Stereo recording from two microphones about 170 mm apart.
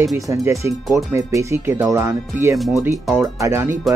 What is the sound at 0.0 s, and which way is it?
Speech, 20° right (ahead or behind).